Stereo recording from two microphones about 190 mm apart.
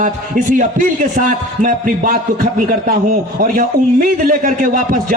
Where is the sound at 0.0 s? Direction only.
45° right (ahead or behind).